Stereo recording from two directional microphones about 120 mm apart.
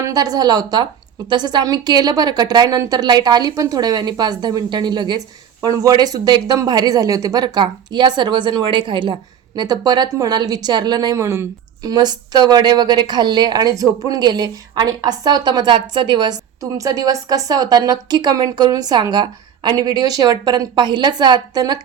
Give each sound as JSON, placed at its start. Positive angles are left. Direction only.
{"t": 0.0, "sound": "a woman's voice", "side_deg": -30}
{"t": 16.6, "sound": "a woman's voice", "side_deg": -30}